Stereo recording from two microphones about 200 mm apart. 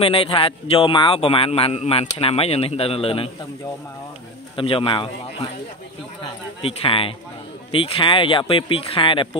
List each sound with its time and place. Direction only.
0.0 s speech: 25° left (ahead or behind)
4.6 s speech: 25° left (ahead or behind)
6.6 s speech: 25° left (ahead or behind)